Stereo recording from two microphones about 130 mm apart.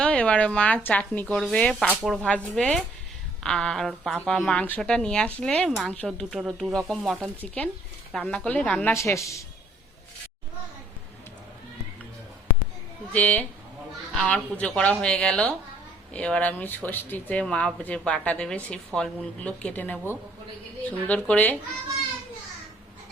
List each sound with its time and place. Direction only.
0.0 s speech: 10° left (ahead or behind)
13.1 s speech: 10° left (ahead or behind)